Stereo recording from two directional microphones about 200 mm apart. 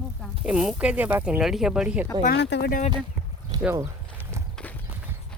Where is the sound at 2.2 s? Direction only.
60° left (ahead or behind); by 2.9 s 45° left (ahead or behind).